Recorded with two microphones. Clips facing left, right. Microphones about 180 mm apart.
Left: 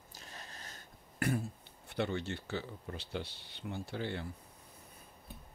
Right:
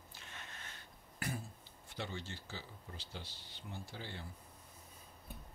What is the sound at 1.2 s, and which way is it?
Throat clearing, 60° left (ahead or behind).